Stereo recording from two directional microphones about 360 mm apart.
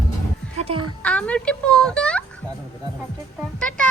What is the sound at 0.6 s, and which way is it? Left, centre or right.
Music, centre.